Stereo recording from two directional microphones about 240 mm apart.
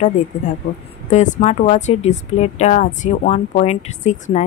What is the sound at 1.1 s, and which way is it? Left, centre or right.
Speech, left.